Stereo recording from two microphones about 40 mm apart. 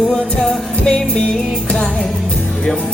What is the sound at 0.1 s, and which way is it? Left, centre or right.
Music, centre.